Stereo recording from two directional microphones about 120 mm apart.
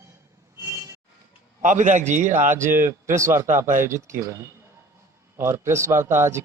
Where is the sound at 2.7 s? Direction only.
20° right (ahead or behind).